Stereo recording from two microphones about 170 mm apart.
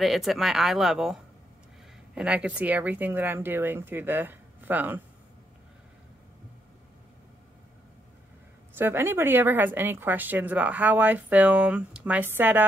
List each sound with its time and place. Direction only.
0.0 s a woman's voice: centre (ahead or behind)
8.7 s a woman's voice: 10° right (ahead or behind)